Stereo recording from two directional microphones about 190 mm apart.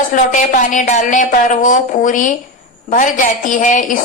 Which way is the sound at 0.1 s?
45° left (ahead or behind).